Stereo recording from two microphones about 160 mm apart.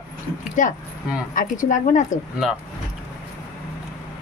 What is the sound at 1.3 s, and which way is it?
Speech, 55° left (ahead or behind).